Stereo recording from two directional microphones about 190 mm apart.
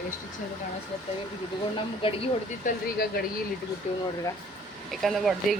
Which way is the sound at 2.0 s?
30° left (ahead or behind).